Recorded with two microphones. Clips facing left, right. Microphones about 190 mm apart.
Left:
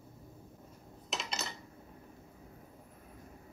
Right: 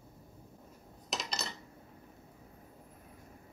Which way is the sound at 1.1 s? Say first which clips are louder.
Right 1 dB; 35° right (ahead or behind).